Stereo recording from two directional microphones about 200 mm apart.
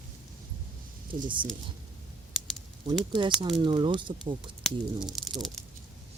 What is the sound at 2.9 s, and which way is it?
Speech, 25° right (ahead or behind).